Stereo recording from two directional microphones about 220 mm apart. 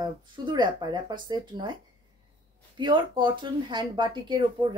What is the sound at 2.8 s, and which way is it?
Speech, 20° right (ahead or behind).